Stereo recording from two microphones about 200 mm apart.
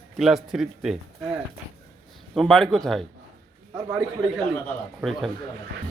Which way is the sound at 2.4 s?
Centre (ahead or behind).